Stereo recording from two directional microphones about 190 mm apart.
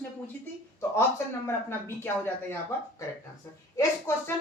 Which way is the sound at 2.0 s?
10° left (ahead or behind).